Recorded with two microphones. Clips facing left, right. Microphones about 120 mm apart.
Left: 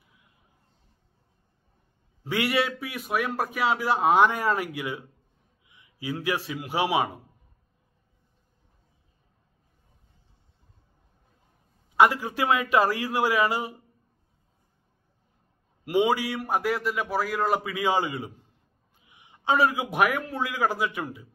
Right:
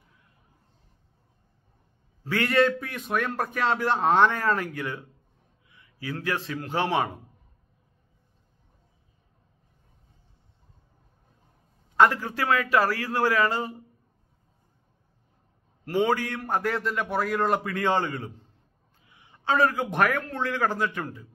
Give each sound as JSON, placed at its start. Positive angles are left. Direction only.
{"t": 2.2, "sound": "a man's voice", "side_deg": 10}
{"t": 12.0, "sound": "a man's voice", "side_deg": 15}
{"t": 15.8, "sound": "a man's voice", "side_deg": 15}